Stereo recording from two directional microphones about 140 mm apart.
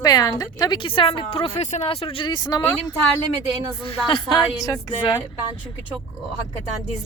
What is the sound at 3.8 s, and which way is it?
Speech, 40° left (ahead or behind).